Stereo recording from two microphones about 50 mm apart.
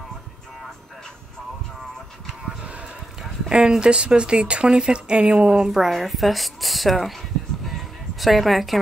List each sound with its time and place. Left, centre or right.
2.4 s a sound: right
3.4 s speech: centre
5.7 s speech: centre